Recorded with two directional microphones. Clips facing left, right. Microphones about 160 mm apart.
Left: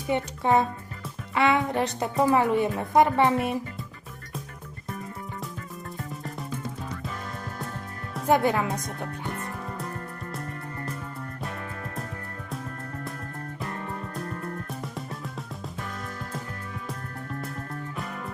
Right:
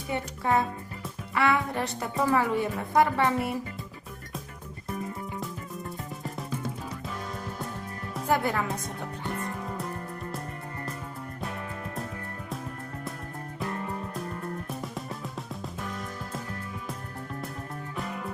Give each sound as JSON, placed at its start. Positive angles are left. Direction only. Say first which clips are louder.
{"t": 0.1, "sound": "speech", "louder": "left 4 dB", "side_deg": 20}
{"t": 8.3, "sound": "speech", "louder": "left 4 dB", "side_deg": 20}
{"t": 9.3, "sound": "music", "louder": "right 1 dB", "side_deg": 0}
{"t": 13.6, "sound": "music", "louder": "right 2 dB", "side_deg": 0}